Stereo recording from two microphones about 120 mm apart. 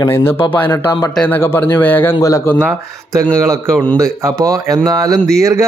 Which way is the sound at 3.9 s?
25° right (ahead or behind).